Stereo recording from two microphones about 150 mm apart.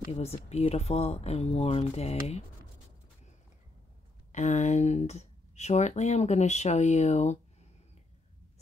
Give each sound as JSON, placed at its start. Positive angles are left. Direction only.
{"t": 0.1, "sound": "speech", "side_deg": 45}
{"t": 4.3, "sound": "speech", "side_deg": 55}